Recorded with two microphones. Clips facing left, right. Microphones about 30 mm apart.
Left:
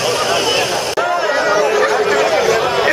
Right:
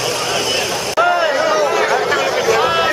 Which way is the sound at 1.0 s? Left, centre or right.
Centre.